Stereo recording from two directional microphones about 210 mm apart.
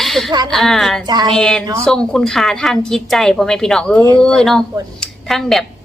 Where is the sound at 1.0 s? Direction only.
20° right (ahead or behind).